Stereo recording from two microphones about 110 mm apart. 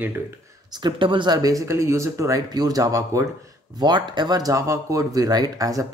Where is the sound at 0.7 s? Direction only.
45° right (ahead or behind); by 3.3 s 30° right (ahead or behind).